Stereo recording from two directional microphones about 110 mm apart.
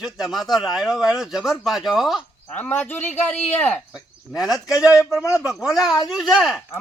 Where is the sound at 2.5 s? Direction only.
15° left (ahead or behind).